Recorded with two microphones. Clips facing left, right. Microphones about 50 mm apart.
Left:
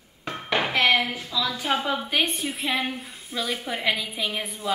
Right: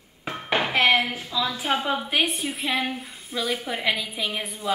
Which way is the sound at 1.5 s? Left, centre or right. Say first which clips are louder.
Even; centre.